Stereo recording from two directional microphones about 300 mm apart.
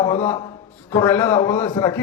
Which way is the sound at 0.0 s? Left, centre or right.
Centre.